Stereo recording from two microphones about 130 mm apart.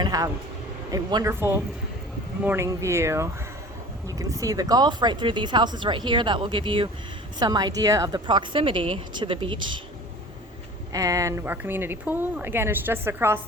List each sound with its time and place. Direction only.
0.0 s a woman's voice: 30° right (ahead or behind)
10.9 s a woman's voice: 25° right (ahead or behind)